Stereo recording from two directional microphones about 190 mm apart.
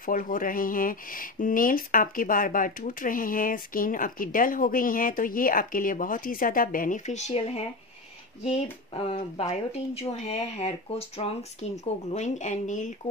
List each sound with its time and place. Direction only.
0.0 s speech: 45° left (ahead or behind)
8.9 s speech: 30° left (ahead or behind)